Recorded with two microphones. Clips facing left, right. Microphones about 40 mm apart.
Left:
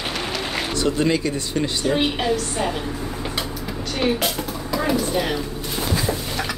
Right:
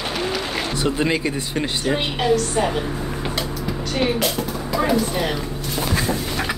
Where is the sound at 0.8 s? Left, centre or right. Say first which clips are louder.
Left 1 dB; centre.